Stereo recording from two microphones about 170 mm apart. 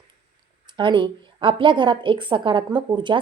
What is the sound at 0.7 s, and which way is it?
A woman's voice, 30° right (ahead or behind).